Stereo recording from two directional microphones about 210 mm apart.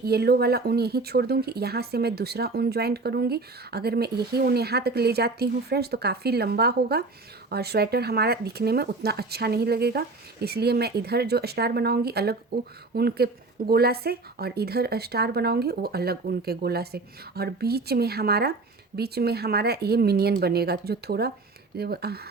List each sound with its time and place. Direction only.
0.0 s speech: 50° right (ahead or behind)